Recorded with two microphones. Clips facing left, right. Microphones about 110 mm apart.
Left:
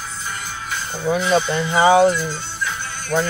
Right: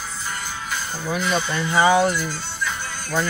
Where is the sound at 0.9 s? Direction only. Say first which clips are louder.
Left 6 dB; 20° left (ahead or behind).